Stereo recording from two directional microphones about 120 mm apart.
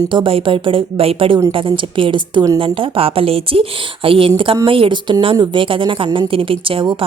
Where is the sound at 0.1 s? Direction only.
45° right (ahead or behind).